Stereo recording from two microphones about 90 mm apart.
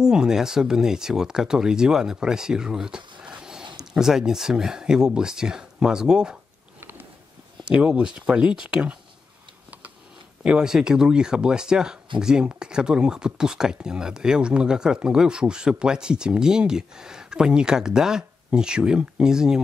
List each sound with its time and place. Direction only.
0.0 s speech: 5° right (ahead or behind)
7.6 s speech: 10° right (ahead or behind)
10.4 s speech: 10° right (ahead or behind)